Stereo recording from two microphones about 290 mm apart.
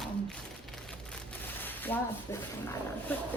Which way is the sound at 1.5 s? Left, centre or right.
Centre.